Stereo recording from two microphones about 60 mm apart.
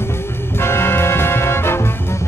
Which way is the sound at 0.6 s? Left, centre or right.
Left.